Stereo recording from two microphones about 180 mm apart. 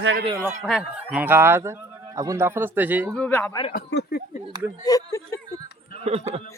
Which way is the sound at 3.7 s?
65° left (ahead or behind).